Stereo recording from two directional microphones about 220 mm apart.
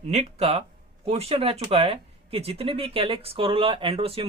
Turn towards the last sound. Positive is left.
turn(degrees=-25)  # may be behind; listen again after turning